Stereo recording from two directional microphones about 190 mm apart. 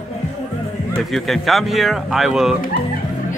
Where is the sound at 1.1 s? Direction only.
Centre (ahead or behind).